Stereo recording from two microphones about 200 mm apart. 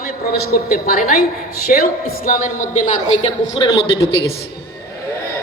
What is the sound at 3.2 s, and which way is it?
A woman's voice, 25° left (ahead or behind).